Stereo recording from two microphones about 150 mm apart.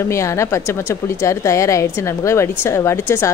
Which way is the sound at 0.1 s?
20° left (ahead or behind).